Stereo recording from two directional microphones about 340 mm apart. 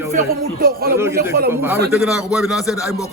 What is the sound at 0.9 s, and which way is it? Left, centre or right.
A man's voice, centre.